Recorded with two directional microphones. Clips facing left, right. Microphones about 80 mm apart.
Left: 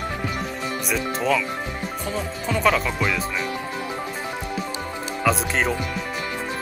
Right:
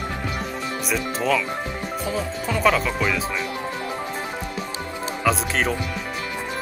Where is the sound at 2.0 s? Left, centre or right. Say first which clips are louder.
Right 3 dB; centre.